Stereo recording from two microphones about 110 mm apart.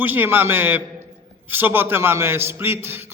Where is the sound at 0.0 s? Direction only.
20° right (ahead or behind).